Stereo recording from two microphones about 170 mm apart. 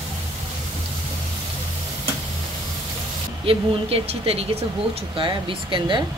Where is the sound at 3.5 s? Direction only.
35° right (ahead or behind).